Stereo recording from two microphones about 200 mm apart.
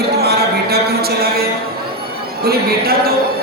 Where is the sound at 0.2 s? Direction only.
50° right (ahead or behind).